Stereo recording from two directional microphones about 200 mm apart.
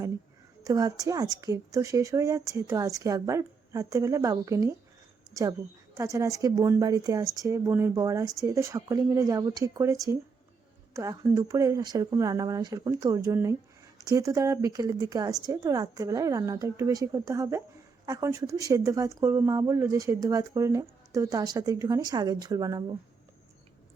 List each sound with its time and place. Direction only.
0.6 s speech: 20° right (ahead or behind)